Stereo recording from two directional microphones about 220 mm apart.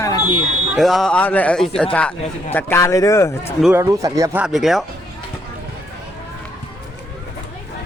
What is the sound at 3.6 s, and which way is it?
Speech, 10° right (ahead or behind).